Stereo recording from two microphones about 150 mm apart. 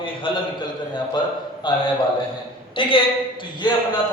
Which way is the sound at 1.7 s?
30° left (ahead or behind).